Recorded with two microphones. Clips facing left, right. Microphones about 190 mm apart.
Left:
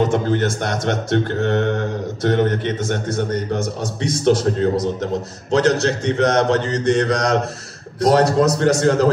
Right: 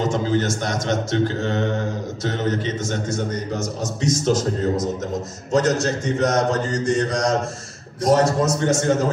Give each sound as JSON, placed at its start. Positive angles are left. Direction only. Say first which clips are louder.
{"t": 0.0, "sound": "a man's voice", "louder": "left 3 dB", "side_deg": 60}